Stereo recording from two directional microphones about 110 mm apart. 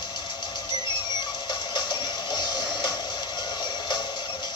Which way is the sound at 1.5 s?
45° left (ahead or behind).